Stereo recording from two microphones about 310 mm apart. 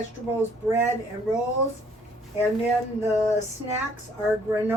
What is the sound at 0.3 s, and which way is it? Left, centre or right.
Speech, centre.